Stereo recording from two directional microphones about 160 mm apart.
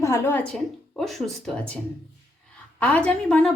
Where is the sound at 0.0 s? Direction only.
15° left (ahead or behind).